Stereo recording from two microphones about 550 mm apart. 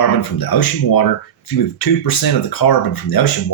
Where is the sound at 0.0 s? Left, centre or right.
Left.